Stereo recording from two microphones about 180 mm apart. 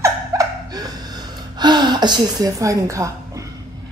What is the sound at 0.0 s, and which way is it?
Chuckle, 20° right (ahead or behind).